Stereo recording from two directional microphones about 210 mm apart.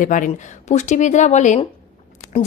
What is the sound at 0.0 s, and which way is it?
A woman's voice, 40° left (ahead or behind).